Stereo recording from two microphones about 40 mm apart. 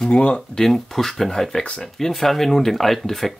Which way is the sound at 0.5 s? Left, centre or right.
Centre.